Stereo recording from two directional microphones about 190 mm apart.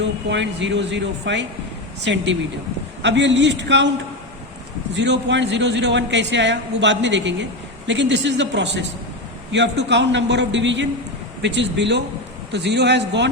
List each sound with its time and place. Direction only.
0.0 s a man's voice: 70° right (ahead or behind)
4.9 s a man's voice: 70° right (ahead or behind)